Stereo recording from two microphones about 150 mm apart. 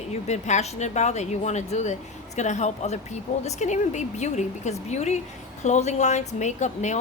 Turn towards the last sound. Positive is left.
turn(degrees=50)  # may be behind; listen again after turning